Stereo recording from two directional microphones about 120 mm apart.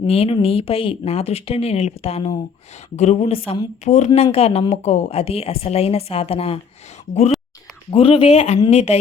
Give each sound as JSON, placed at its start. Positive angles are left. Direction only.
{"t": 0.1, "sound": "speech", "side_deg": 55}
{"t": 2.9, "sound": "speech", "side_deg": 70}
{"t": 3.8, "sound": "speech", "side_deg": 70}
{"t": 7.9, "sound": "speech", "side_deg": 50}